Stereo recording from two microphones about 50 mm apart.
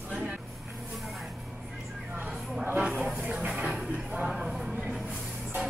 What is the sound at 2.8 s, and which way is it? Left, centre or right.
Speech, right.